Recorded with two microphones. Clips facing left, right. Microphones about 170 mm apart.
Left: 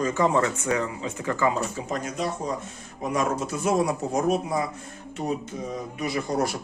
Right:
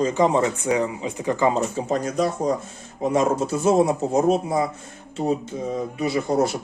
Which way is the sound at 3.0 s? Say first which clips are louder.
Right 6 dB; 30° right (ahead or behind).